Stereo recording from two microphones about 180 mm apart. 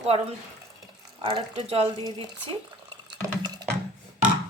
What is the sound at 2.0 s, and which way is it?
Speech, 25° right (ahead or behind).